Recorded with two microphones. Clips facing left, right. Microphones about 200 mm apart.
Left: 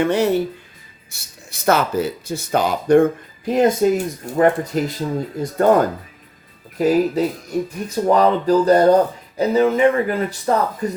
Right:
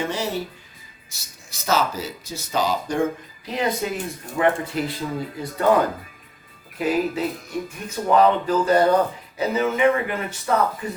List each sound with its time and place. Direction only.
0.0 s speech: 60° left (ahead or behind); by 10.9 s 35° left (ahead or behind)